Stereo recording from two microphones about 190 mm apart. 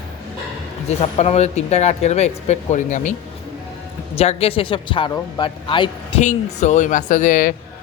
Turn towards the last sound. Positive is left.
turn(degrees=45)  # may be behind; listen again after turning